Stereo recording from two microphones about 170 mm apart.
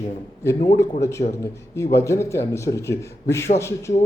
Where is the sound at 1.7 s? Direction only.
15° left (ahead or behind).